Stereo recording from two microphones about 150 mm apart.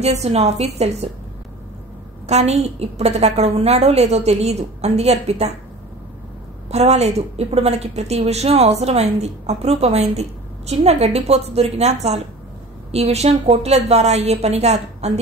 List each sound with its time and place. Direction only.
0.0 s a woman's voice: 45° right (ahead or behind)
2.2 s a woman's voice: 45° right (ahead or behind)
6.7 s a woman's voice: 45° right (ahead or behind)